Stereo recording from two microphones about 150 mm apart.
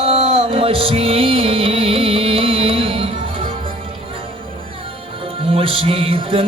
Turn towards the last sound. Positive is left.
turn(degrees=-40)  # may be behind; listen again after turning